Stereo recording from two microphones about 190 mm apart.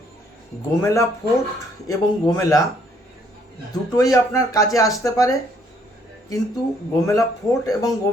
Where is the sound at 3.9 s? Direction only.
15° left (ahead or behind).